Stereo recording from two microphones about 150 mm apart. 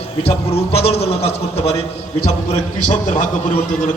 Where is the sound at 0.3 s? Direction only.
45° left (ahead or behind).